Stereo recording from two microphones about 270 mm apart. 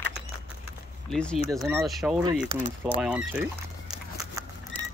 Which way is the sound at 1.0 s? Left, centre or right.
Centre.